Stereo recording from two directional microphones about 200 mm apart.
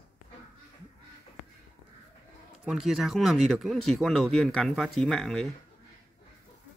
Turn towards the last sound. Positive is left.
turn(degrees=0)  # may be behind; listen again after turning